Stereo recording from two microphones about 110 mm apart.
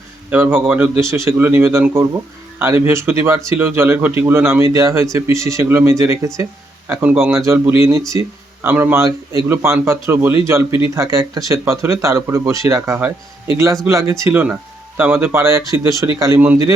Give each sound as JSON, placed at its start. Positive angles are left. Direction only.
{"t": 0.3, "sound": "speech", "side_deg": -15}